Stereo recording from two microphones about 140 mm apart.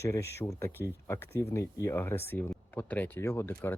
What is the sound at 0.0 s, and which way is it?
Speech, 20° left (ahead or behind).